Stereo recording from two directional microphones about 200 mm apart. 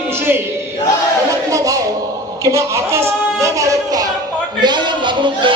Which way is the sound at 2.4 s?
15° right (ahead or behind).